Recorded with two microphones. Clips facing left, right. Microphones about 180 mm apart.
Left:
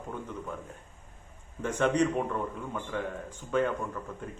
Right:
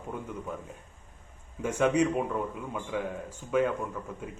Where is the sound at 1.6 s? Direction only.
10° right (ahead or behind).